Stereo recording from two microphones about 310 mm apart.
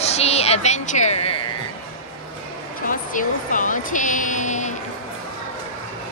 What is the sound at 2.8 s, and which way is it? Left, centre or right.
Speech, left.